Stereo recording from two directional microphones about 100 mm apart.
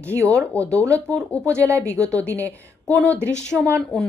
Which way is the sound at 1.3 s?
30° right (ahead or behind).